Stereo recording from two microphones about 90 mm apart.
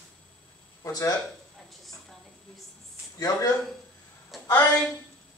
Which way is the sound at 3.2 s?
45° left (ahead or behind).